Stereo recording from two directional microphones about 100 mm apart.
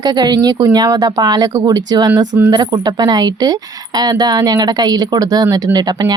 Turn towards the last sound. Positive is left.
turn(degrees=-45)  # may be behind; listen again after turning